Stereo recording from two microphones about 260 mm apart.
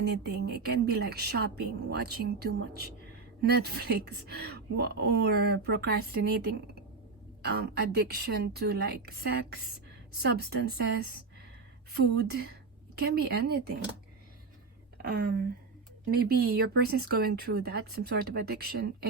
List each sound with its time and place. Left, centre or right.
0.0 s speech: right
15.0 s speech: right